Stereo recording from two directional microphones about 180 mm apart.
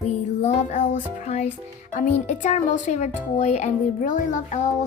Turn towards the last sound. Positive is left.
turn(degrees=40)  # may be behind; listen again after turning